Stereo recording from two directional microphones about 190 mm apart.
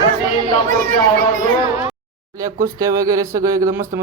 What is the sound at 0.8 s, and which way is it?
Speech, 45° right (ahead or behind).